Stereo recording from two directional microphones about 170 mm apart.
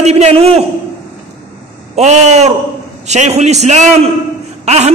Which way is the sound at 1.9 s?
45° right (ahead or behind).